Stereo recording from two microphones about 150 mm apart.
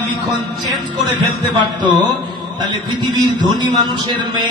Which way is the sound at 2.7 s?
30° right (ahead or behind).